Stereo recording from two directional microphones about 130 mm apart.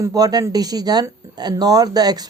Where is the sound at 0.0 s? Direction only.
30° right (ahead or behind).